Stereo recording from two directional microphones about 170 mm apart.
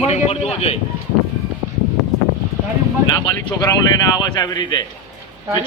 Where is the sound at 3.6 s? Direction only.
20° left (ahead or behind).